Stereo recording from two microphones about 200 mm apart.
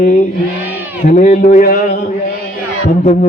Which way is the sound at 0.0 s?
35° left (ahead or behind).